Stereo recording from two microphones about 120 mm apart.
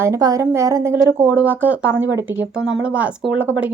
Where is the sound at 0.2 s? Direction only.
30° right (ahead or behind).